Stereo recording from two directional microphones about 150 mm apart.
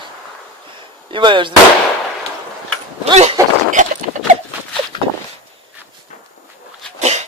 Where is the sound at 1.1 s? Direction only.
35° right (ahead or behind).